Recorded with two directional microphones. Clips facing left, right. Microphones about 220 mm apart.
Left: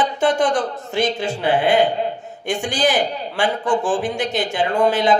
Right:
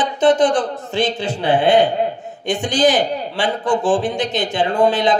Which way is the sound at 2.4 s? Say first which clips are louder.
Right 2 dB; 20° right (ahead or behind).